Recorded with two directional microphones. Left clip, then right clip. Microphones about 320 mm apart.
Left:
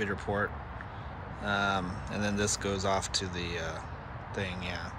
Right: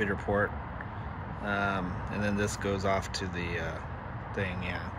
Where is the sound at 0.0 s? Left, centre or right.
Centre.